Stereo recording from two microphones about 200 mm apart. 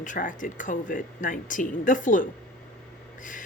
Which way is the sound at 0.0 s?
40° left (ahead or behind).